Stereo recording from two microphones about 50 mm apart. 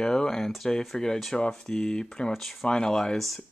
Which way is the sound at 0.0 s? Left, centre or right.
Centre.